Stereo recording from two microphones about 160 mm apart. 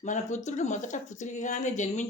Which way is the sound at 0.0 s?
50° left (ahead or behind).